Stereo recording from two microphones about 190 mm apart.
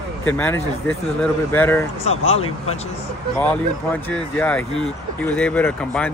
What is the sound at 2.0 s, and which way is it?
Speech, 30° left (ahead or behind).